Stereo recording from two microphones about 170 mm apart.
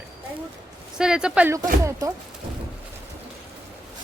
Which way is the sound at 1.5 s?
15° right (ahead or behind).